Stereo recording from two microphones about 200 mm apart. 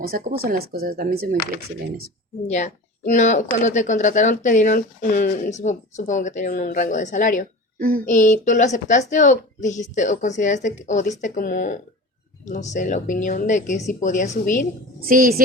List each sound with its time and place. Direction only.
0.4 s speech: 50° right (ahead or behind)
2.5 s speech: 35° left (ahead or behind)
7.8 s child singing: 45° right (ahead or behind)
8.0 s speech: 40° left (ahead or behind)
15.0 s speech: 45° right (ahead or behind)